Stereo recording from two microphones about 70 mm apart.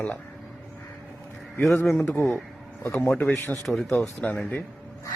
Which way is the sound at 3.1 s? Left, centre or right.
Centre.